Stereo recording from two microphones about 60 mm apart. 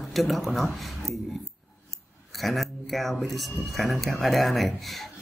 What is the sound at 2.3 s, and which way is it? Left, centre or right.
Speech, centre.